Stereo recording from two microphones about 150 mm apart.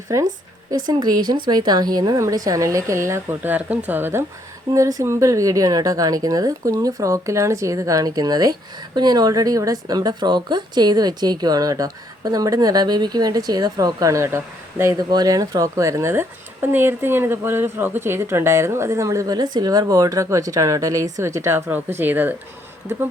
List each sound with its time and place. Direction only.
0.1 s speech: 20° right (ahead or behind)